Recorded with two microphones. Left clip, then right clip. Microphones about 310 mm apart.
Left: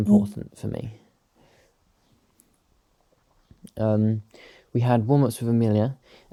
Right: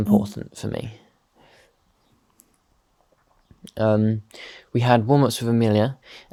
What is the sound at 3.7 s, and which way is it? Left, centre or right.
Speech, right.